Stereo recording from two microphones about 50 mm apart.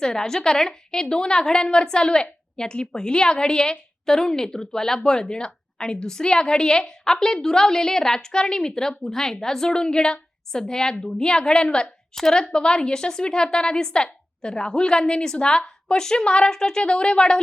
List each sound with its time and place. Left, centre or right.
0.0 s a woman's voice: centre